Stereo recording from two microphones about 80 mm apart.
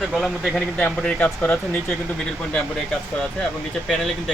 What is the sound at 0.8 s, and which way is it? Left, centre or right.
Speech, centre.